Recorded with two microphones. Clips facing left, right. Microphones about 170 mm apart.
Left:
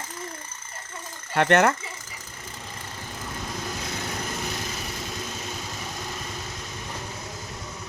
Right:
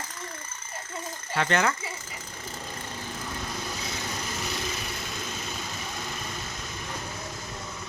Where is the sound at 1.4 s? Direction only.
60° left (ahead or behind).